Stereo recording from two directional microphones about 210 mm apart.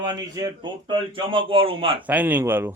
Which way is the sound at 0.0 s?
15° right (ahead or behind).